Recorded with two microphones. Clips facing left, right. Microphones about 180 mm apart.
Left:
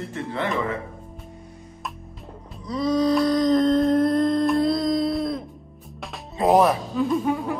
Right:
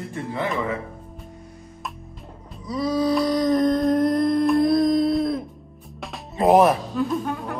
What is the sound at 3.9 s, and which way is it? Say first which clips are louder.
Humming: even; 15° right (ahead or behind).